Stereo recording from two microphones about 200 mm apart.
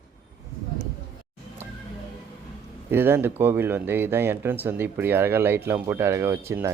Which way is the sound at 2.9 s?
10° right (ahead or behind).